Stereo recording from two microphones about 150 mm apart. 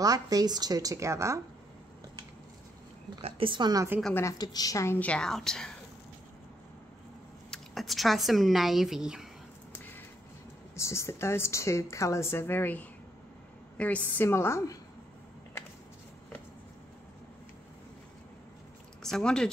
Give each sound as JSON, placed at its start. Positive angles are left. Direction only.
{"t": 0.0, "sound": "a woman's voice", "side_deg": -25}
{"t": 3.2, "sound": "a woman's voice", "side_deg": -40}
{"t": 4.1, "sound": "a woman's voice", "side_deg": 20}
{"t": 7.5, "sound": "speech", "side_deg": 0}
{"t": 10.7, "sound": "a woman's voice", "side_deg": 20}
{"t": 19.0, "sound": "speech", "side_deg": 5}